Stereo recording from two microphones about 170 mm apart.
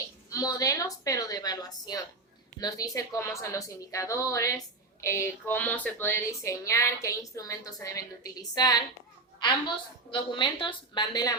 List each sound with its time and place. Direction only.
0.3 s a woman's voice: 20° left (ahead or behind)